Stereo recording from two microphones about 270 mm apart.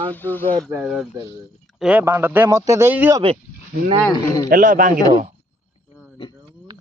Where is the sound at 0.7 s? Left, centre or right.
Centre.